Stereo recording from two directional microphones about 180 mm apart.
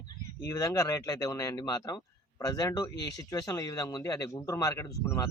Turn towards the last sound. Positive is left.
turn(degrees=15)  # may be behind; listen again after turning